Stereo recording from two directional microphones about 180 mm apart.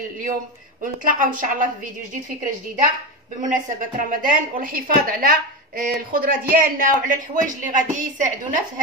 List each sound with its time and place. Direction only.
1.0 s speech: 50° right (ahead or behind)
3.3 s speech: 45° right (ahead or behind)